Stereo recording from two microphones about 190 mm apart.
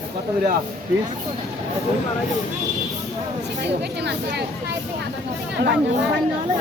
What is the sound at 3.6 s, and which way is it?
Speech, 60° right (ahead or behind).